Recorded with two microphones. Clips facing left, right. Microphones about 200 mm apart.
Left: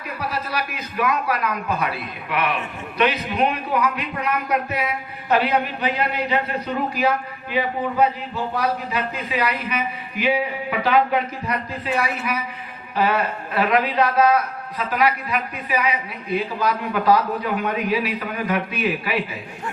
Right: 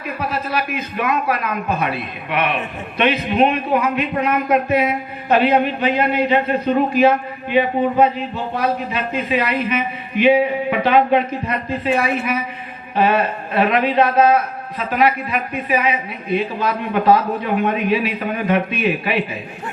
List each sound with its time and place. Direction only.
0.2 s a man's voice: 25° right (ahead or behind)